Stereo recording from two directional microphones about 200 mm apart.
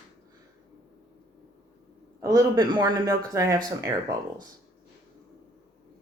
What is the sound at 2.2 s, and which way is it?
Speech, 15° right (ahead or behind).